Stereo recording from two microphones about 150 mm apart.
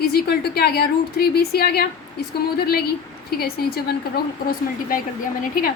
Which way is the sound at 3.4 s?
90° left.